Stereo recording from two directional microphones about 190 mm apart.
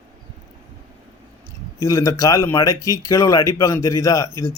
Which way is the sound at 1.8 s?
15° left (ahead or behind).